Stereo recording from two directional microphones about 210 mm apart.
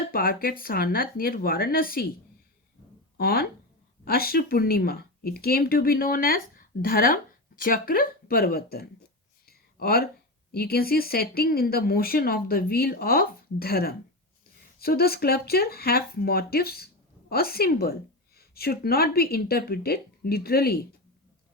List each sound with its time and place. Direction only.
0.1 s speech: 45° left (ahead or behind)
3.2 s speech: 50° left (ahead or behind)
9.5 s a sound: 45° left (ahead or behind)
10.5 s speech: 45° left (ahead or behind)